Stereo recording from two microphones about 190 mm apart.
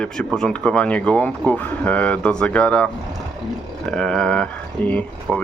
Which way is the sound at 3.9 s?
5° left (ahead or behind).